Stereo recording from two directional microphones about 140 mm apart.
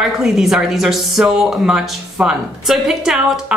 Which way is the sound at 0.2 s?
Centre (ahead or behind).